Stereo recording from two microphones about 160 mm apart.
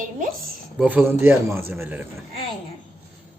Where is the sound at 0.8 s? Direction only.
10° right (ahead or behind).